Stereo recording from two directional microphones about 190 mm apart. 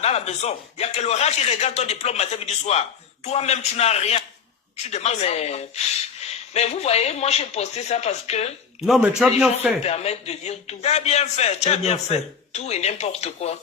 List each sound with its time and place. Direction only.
0.0 s a man's voice: 35° left (ahead or behind)
8.9 s a man's voice: 5° right (ahead or behind)
9.8 s a man's voice: 35° left (ahead or behind)